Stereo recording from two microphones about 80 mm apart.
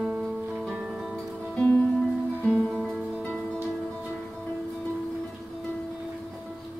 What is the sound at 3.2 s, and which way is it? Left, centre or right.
Music, centre.